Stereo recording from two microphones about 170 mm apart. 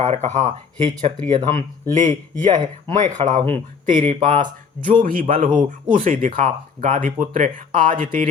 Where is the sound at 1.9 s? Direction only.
45° right (ahead or behind).